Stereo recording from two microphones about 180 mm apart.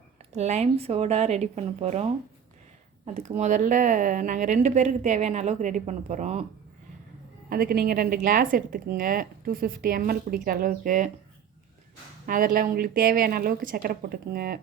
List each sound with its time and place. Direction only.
0.3 s a woman's voice: 35° right (ahead or behind)
3.2 s a woman's voice: 40° right (ahead or behind)
7.5 s a woman's voice: 55° right (ahead or behind)
12.2 s a woman's voice: 50° right (ahead or behind)